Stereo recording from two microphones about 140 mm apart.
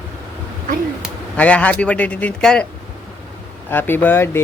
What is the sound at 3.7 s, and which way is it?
Speech, 15° left (ahead or behind).